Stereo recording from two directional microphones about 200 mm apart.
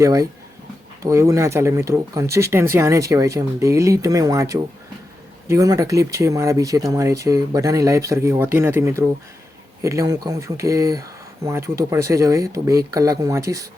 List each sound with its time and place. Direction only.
0.0 s speech: 15° right (ahead or behind)